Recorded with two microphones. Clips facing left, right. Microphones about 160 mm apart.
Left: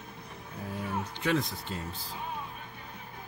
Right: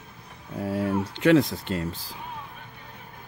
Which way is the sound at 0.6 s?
75° right (ahead or behind).